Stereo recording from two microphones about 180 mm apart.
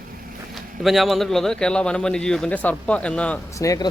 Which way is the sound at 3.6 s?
20° left (ahead or behind).